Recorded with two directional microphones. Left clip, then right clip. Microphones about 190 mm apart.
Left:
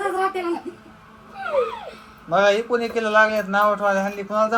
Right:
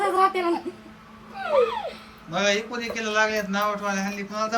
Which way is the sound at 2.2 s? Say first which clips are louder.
Left 6 dB; centre (ahead or behind).